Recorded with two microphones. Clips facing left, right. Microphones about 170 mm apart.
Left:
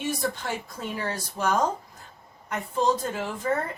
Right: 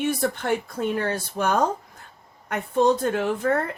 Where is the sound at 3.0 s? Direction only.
65° right (ahead or behind).